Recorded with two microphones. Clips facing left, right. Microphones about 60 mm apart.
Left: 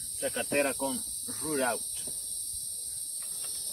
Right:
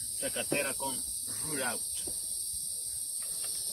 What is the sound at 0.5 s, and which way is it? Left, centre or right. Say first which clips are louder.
Cricket: left 5 dB; left.